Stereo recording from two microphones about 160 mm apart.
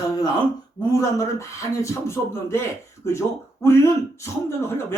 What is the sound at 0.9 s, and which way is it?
Speech, 20° left (ahead or behind).